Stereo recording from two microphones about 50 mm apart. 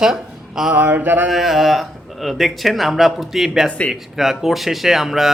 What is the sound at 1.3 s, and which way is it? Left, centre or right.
A man's voice, centre.